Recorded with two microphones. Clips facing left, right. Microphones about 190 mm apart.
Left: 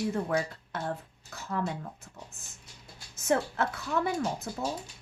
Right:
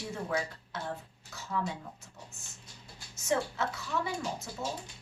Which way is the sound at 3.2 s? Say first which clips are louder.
Left 3 dB; 55° left (ahead or behind).